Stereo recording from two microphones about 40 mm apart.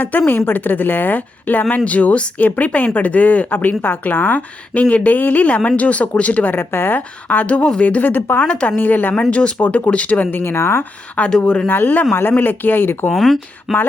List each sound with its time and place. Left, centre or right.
0.0 s a woman's voice: left
1.8 s speech: left
6.5 s a woman's voice: left
6.9 s speech: left
9.3 s speech: left
9.6 s speech: left
9.9 s speech: left
10.3 s speech: left
11.3 s speech: centre
11.7 s a woman's voice: left
13.1 s speech: centre